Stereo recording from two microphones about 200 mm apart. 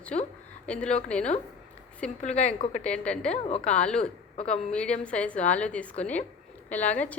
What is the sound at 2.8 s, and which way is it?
Speech, 5° left (ahead or behind).